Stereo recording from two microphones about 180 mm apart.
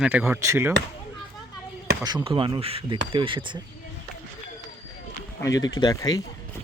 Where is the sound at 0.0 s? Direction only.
10° right (ahead or behind).